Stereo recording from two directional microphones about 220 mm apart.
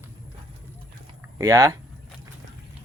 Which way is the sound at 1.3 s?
15° right (ahead or behind).